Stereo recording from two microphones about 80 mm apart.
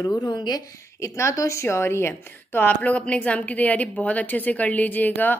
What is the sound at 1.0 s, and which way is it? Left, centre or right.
A woman's voice, left.